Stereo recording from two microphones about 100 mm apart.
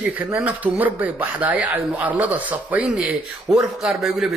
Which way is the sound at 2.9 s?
5° right (ahead or behind).